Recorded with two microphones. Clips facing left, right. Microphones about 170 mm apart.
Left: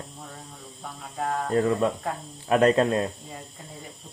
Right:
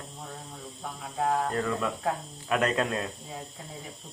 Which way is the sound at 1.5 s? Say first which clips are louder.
Left 7 dB; 30° left (ahead or behind).